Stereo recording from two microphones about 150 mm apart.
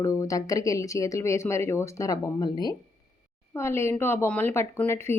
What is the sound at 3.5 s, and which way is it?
A woman's voice, 15° left (ahead or behind).